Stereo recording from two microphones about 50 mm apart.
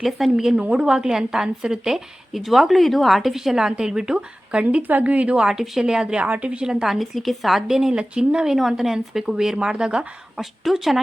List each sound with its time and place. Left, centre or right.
0.2 s a woman's voice: centre
0.5 s a woman's voice: right
4.8 s a woman's voice: right
5.4 s a woman's voice: centre
6.2 s a woman's voice: right
6.8 s a woman's voice: centre
7.9 s a woman's voice: centre
8.4 s a woman's voice: centre
10.4 s a woman's voice: centre